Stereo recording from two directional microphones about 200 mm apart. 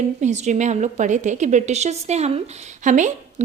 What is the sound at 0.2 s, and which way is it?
A woman's voice, 35° right (ahead or behind).